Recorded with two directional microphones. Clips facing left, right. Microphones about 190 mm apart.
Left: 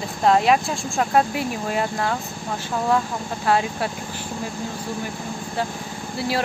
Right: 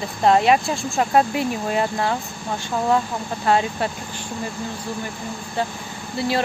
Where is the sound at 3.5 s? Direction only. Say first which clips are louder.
Right 1 dB; centre (ahead or behind).